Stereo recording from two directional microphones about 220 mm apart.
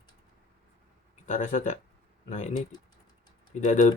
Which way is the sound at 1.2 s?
35° left (ahead or behind).